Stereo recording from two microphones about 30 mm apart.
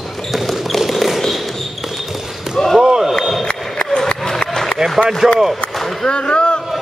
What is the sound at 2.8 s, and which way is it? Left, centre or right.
Basketball bounce, right.